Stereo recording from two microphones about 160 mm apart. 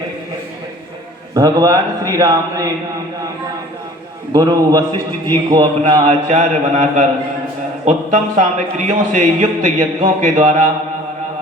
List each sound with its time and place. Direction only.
1.3 s a man's voice: 25° right (ahead or behind)
4.3 s a man's voice: 25° right (ahead or behind)
6.2 s a man's voice: 50° right (ahead or behind)